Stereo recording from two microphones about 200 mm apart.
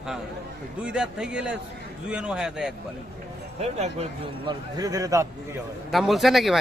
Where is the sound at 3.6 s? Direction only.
35° right (ahead or behind).